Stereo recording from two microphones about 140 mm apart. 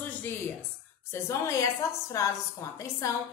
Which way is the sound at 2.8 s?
25° left (ahead or behind).